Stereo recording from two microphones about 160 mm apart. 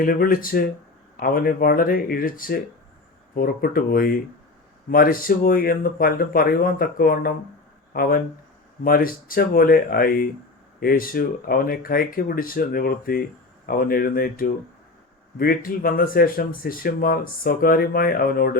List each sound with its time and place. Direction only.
0.0 s speech: 65° left (ahead or behind)